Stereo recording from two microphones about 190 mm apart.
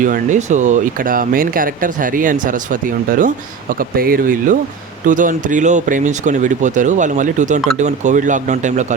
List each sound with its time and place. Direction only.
0.0 s speech: 40° right (ahead or behind)